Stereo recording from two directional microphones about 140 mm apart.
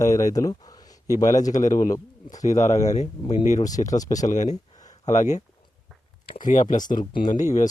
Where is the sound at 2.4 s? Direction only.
60° left (ahead or behind).